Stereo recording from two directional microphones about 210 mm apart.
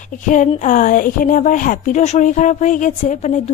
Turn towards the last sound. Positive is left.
turn(degrees=35)  # may be behind; listen again after turning